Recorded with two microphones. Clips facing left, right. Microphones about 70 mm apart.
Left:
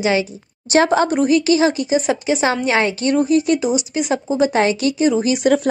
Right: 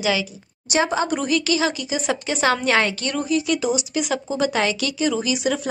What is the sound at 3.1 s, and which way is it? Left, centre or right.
Speech, left.